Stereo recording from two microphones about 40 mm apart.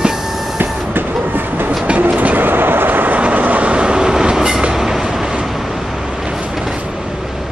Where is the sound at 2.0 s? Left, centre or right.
Right.